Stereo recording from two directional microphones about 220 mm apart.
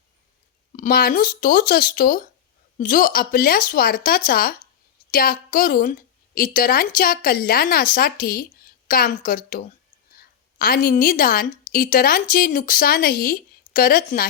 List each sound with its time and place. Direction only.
0.8 s a woman's voice: 45° left (ahead or behind)